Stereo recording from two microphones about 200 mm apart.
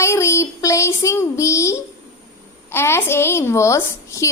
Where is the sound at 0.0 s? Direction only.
15° left (ahead or behind).